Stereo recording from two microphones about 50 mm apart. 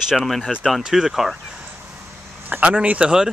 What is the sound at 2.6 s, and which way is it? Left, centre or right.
Speech, right.